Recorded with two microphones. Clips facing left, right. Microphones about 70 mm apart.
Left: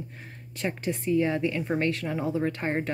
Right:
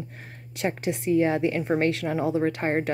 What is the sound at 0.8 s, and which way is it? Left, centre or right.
Speech, right.